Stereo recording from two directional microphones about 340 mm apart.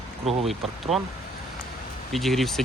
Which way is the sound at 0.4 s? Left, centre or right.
Centre.